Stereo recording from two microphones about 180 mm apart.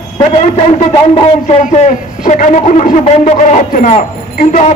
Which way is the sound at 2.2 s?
45° left (ahead or behind).